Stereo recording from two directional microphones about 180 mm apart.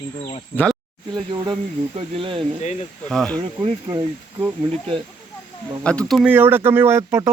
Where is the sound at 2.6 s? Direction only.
40° left (ahead or behind).